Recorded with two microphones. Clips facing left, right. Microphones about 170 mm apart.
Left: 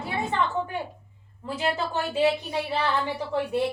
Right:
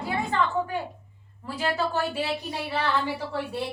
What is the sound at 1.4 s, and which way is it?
Speech, 20° left (ahead or behind).